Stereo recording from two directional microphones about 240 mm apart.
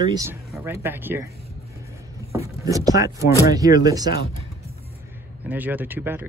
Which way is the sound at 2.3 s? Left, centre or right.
Centre.